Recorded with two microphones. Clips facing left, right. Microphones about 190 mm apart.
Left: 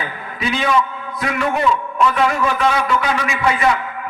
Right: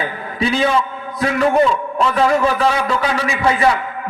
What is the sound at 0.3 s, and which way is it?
A man's voice, 30° right (ahead or behind).